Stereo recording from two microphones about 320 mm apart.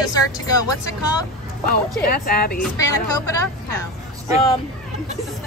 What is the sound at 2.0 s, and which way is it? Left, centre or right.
Speech, left.